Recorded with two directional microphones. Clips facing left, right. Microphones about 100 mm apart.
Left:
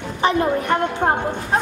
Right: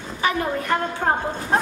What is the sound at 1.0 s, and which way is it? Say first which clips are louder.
Speech: left 2 dB; 15° left (ahead or behind).